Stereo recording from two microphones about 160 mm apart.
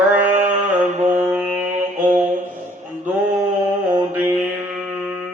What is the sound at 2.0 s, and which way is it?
Music, 10° right (ahead or behind).